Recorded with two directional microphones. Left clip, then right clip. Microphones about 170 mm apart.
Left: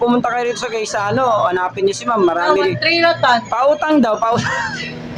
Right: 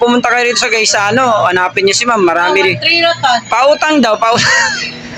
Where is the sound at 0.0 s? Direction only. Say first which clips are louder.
Right 6 dB; centre (ahead or behind).